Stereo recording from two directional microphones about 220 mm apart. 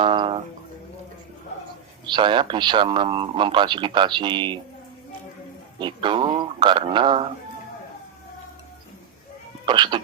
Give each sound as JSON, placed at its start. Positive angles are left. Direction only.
{"t": 0.0, "sound": "music", "side_deg": -20}
{"t": 2.0, "sound": "a man's voice", "side_deg": -20}
{"t": 5.8, "sound": "a man's voice", "side_deg": -20}
{"t": 9.6, "sound": "a man's voice", "side_deg": -20}